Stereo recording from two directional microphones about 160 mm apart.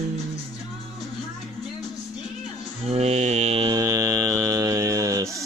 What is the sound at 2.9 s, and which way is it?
Mantra, 40° right (ahead or behind).